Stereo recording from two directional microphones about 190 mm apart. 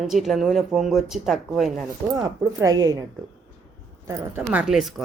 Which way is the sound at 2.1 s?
20° right (ahead or behind).